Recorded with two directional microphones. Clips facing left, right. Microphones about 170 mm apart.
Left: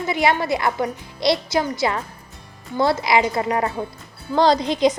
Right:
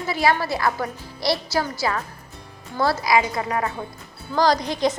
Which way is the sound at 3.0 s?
25° left (ahead or behind).